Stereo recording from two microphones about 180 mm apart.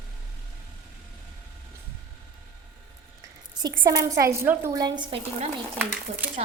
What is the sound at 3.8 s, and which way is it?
A woman's voice, 20° right (ahead or behind).